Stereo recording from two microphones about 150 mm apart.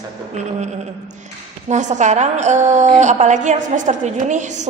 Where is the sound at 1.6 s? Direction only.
50° right (ahead or behind).